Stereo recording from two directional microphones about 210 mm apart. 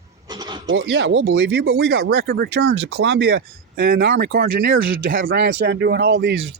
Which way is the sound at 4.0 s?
65° right (ahead or behind).